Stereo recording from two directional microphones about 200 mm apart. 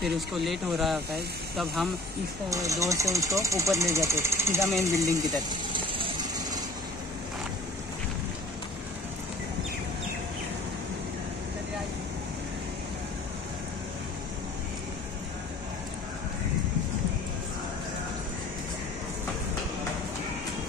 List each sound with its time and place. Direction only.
0.0 s speech: centre (ahead or behind)
2.5 s speech: 15° right (ahead or behind)
5.9 s vehicle: 25° right (ahead or behind)